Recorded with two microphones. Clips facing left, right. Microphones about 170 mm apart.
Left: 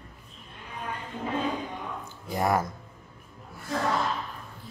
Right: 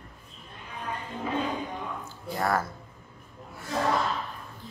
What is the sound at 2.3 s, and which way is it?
Speech, 15° left (ahead or behind).